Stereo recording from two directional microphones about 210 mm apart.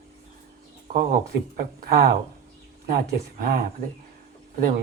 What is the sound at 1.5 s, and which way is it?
Speech, 45° right (ahead or behind).